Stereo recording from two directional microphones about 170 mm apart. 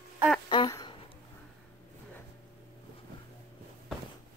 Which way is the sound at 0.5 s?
25° left (ahead or behind).